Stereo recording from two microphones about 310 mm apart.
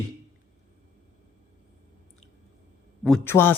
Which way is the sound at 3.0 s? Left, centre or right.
Centre.